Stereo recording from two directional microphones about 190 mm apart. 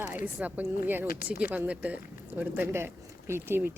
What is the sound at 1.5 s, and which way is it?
Speech, 5° right (ahead or behind).